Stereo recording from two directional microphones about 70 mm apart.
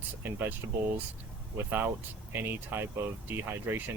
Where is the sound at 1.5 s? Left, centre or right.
Right.